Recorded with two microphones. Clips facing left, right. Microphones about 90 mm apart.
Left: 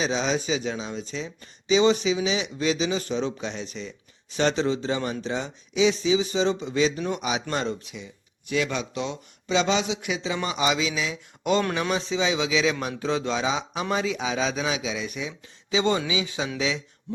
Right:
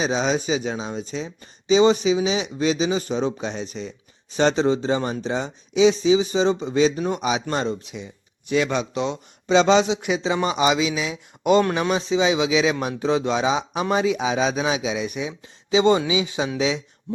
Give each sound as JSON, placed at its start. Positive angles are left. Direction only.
{"t": 0.0, "sound": "a man's voice", "side_deg": -20}
{"t": 6.5, "sound": "speech", "side_deg": -45}
{"t": 6.7, "sound": "a man's voice", "side_deg": -25}
{"t": 10.8, "sound": "a man's voice", "side_deg": -15}